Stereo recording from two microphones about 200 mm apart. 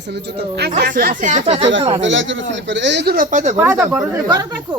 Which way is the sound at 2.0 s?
70° right (ahead or behind).